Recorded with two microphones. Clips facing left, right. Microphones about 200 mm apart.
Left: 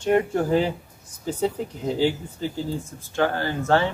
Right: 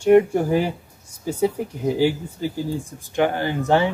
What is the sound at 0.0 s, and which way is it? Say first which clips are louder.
Speech: right 6 dB; 10° right (ahead or behind).